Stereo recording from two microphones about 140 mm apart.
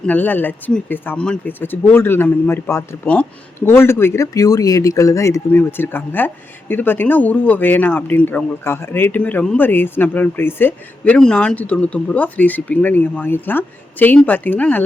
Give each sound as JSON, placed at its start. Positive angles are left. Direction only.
{"t": 0.0, "sound": "speech", "side_deg": 10}